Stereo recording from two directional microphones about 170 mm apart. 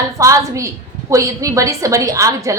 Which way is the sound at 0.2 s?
20° right (ahead or behind).